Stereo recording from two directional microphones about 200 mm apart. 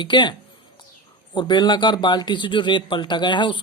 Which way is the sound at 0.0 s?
25° left (ahead or behind).